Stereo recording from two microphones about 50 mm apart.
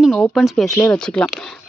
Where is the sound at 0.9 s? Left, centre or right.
Left.